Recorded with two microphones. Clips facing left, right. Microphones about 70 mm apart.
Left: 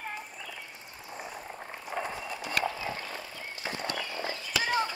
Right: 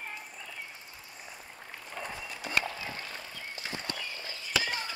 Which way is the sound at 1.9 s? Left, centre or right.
Left.